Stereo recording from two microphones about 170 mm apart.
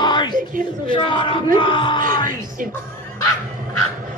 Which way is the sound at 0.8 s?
30° left (ahead or behind).